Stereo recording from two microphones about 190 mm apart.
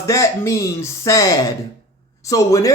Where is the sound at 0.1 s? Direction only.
15° left (ahead or behind).